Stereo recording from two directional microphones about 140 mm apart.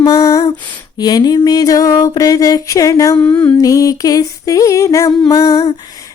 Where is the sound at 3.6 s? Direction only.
25° left (ahead or behind).